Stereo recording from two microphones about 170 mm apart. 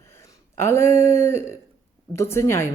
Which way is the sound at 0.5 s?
15° left (ahead or behind).